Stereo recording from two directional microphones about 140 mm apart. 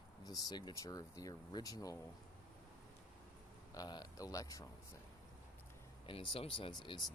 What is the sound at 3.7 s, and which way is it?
Speech, 30° left (ahead or behind).